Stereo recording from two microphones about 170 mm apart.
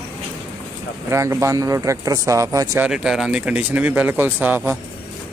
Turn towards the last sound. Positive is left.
turn(degrees=-10)  # may be behind; listen again after turning